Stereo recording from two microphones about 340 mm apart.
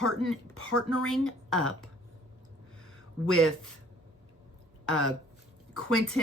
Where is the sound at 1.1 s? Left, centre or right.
Centre.